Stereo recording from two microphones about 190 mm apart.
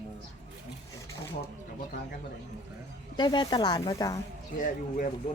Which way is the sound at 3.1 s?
25° left (ahead or behind).